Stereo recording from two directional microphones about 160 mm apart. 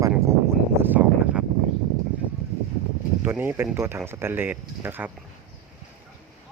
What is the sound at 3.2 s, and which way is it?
Speech, 10° right (ahead or behind).